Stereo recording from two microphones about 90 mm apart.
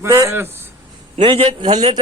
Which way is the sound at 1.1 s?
70° right (ahead or behind).